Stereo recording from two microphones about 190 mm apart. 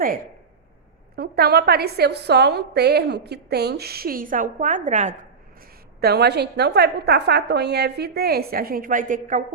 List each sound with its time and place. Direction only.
1.1 s a woman's voice: 55° right (ahead or behind); by 5.1 s 40° right (ahead or behind)
6.0 s a woman's voice: 60° right (ahead or behind); by 9.4 s 40° right (ahead or behind)